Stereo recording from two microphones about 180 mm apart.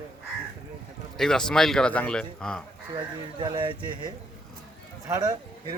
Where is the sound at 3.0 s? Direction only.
25° right (ahead or behind).